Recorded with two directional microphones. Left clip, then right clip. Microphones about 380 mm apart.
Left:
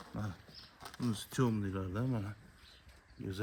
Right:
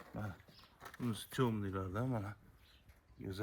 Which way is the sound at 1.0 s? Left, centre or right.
Centre.